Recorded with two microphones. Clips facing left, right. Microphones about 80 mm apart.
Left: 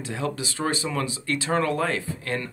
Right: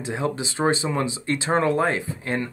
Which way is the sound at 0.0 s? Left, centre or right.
Right.